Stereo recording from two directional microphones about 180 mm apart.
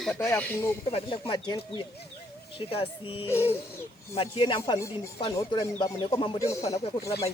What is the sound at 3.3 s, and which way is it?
Speech, 15° left (ahead or behind).